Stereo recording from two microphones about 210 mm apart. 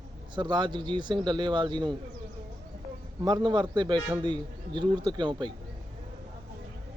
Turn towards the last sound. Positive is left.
turn(degrees=-20)  # may be behind; listen again after turning